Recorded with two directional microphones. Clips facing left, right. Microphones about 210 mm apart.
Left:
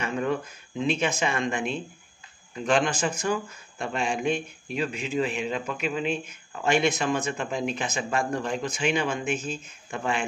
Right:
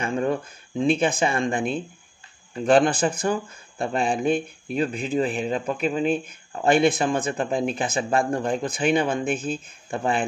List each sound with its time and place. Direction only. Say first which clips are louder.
0.0 s speech: right 3 dB; 30° right (ahead or behind)